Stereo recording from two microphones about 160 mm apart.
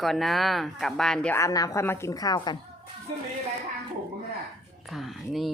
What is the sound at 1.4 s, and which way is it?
A woman's voice, 20° left (ahead or behind).